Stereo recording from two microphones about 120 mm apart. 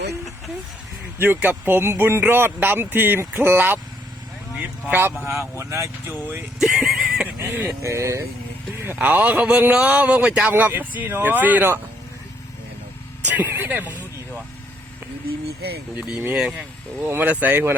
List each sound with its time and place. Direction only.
1.2 s speech: 15° right (ahead or behind)
4.9 s speech: 15° right (ahead or behind)
6.6 s horse: 5° right (ahead or behind)
7.4 s speech: 15° right (ahead or behind)
13.2 s speech: 15° right (ahead or behind)
16.0 s speech: 10° right (ahead or behind)